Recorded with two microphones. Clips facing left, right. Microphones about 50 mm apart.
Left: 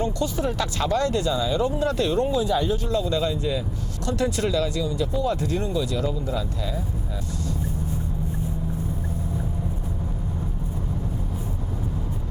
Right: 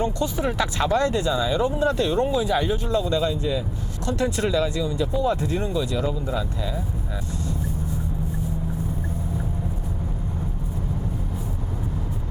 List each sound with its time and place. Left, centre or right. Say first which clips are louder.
0.0 s speech: right 1 dB; right